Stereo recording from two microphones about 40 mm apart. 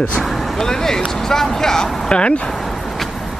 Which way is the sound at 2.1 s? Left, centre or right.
Left.